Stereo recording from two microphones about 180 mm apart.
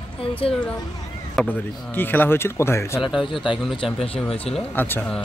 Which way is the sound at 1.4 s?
Centre (ahead or behind).